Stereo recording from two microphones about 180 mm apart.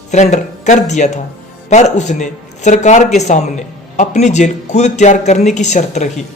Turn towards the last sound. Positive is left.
turn(degrees=40)  # may be behind; listen again after turning